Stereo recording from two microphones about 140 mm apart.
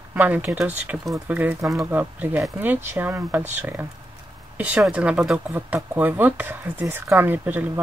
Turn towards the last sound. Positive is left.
turn(degrees=-10)  # may be behind; listen again after turning